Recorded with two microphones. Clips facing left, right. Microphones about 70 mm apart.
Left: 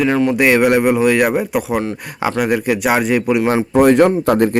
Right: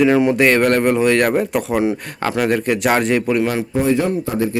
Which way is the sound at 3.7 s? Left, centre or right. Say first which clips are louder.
Left 8 dB; left.